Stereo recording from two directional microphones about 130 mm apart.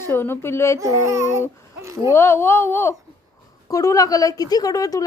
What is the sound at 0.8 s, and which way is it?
Speech, 25° right (ahead or behind).